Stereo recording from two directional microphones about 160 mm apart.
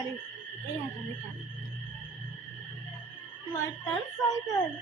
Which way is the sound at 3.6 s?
20° left (ahead or behind).